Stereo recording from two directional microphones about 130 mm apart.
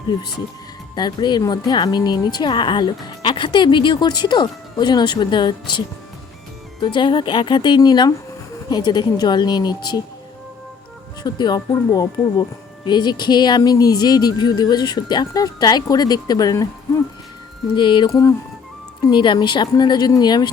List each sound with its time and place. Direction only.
0.9 s speech: 35° left (ahead or behind)
6.8 s speech: 40° left (ahead or behind)
11.2 s speech: 35° left (ahead or behind)
17.7 s speech: 40° left (ahead or behind)
18.1 s speech: 25° left (ahead or behind)
19.1 s speech: 40° left (ahead or behind)